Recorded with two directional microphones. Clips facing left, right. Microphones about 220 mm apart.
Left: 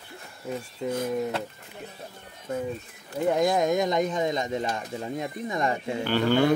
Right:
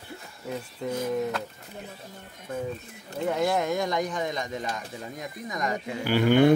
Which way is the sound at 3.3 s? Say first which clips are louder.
Left 2 dB; 15° left (ahead or behind).